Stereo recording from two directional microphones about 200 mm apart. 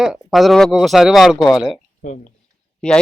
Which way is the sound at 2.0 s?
40° left (ahead or behind).